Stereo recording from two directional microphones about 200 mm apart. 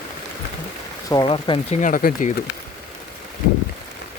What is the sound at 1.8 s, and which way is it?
Speech, 45° left (ahead or behind).